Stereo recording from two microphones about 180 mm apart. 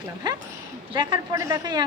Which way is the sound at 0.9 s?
20° right (ahead or behind).